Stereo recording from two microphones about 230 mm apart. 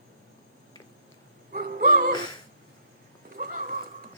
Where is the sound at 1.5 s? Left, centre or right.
Right.